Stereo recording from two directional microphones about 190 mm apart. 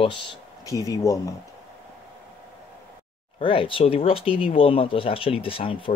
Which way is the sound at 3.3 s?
25° left (ahead or behind).